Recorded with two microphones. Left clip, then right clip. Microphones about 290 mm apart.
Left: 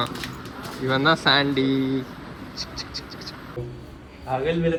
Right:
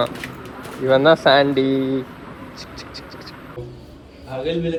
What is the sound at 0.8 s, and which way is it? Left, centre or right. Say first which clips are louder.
A man's voice: right 6 dB; centre.